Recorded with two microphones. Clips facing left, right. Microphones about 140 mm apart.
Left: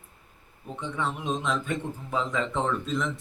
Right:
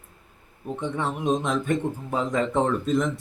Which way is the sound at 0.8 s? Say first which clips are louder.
Right 3 dB; 45° right (ahead or behind).